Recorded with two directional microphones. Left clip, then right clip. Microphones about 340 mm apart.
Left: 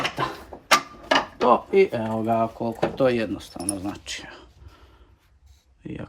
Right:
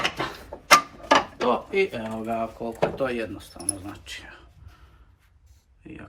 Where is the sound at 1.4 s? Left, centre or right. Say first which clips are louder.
Left 5 dB; centre.